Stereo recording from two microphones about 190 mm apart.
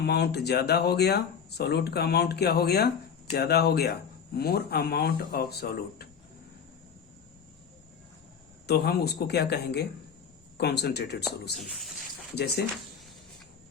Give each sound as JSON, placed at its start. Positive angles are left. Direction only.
{"t": 0.0, "sound": "speech", "side_deg": 60}
{"t": 8.6, "sound": "speech", "side_deg": 55}